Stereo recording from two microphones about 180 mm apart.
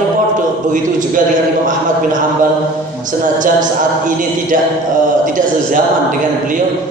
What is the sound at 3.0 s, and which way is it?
A man's voice, 45° right (ahead or behind).